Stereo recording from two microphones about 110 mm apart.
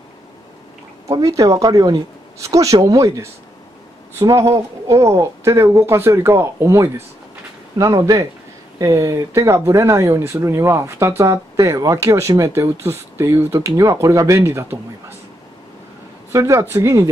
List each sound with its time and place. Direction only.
1.0 s speech: 30° right (ahead or behind)
16.3 s speech: 25° right (ahead or behind)